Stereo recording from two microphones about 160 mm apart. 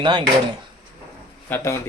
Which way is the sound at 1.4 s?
15° left (ahead or behind).